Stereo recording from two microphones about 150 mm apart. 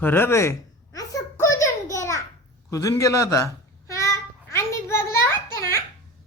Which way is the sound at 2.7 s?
20° left (ahead or behind).